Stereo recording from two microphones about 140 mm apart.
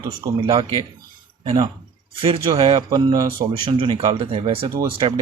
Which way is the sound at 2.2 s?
40° right (ahead or behind).